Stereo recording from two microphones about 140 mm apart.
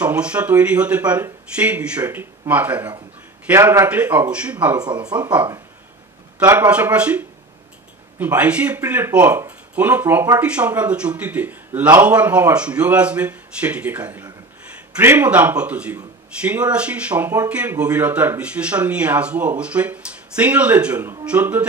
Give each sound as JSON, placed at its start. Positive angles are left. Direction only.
{"t": 0.0, "sound": "speech", "side_deg": -10}
{"t": 4.7, "sound": "speech", "side_deg": -30}
{"t": 6.5, "sound": "speech", "side_deg": -10}